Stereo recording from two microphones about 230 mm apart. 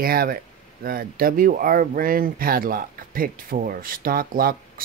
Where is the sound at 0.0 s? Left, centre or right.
Right.